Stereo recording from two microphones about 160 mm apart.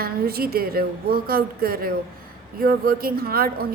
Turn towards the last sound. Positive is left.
turn(degrees=-70)  # may be behind; listen again after turning